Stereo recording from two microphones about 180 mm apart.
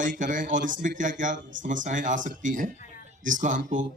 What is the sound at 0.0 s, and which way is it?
A man's voice, 45° right (ahead or behind).